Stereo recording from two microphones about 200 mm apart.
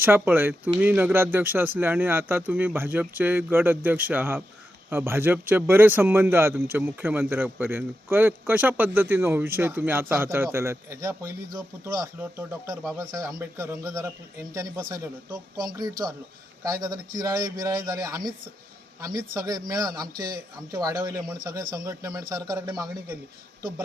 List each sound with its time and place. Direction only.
0.0 s speech: 10° right (ahead or behind)